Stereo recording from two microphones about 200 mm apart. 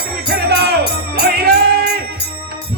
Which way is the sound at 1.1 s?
55° right (ahead or behind).